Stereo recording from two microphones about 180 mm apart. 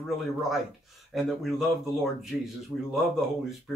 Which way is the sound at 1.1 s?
Centre (ahead or behind).